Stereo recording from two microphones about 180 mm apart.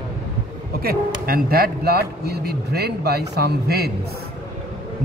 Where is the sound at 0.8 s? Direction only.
55° right (ahead or behind).